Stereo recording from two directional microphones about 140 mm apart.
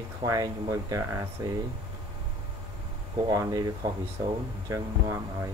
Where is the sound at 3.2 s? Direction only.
30° right (ahead or behind).